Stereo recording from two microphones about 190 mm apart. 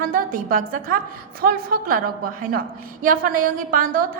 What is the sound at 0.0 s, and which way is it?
A woman's voice, 50° right (ahead or behind).